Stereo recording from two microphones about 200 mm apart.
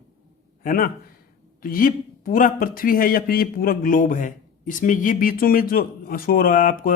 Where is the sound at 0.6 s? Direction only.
45° left (ahead or behind).